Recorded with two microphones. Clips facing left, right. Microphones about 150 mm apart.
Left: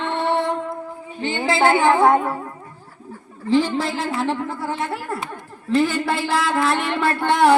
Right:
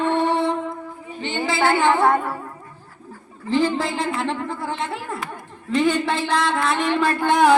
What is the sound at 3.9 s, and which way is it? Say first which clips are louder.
A man's voice: left 1 dB; 5° left (ahead or behind).